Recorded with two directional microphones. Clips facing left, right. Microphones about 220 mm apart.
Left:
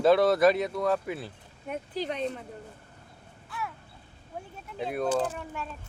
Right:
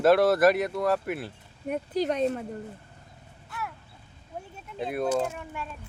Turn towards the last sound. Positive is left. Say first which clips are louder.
# even
turn(degrees=-10)  # may be behind; listen again after turning